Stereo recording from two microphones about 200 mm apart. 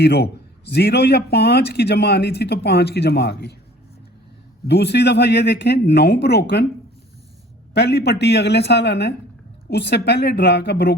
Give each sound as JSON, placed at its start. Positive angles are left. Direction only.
{"t": 0.0, "sound": "a man's voice", "side_deg": 55}
{"t": 4.6, "sound": "a man's voice", "side_deg": 55}
{"t": 7.7, "sound": "a man's voice", "side_deg": 55}